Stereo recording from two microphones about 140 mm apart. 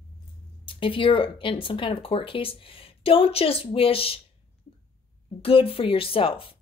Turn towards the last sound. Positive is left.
turn(degrees=40)  # may be behind; listen again after turning